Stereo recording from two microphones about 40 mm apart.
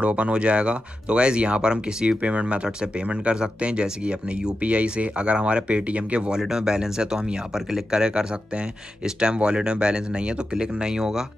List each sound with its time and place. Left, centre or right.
0.0 s speech: right
6.3 s speech: centre